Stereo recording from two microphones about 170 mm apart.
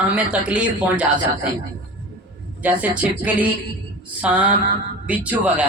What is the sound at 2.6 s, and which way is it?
A man's voice, 10° right (ahead or behind).